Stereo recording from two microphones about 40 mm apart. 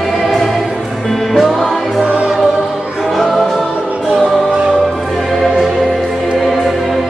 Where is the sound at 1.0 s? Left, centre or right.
Centre.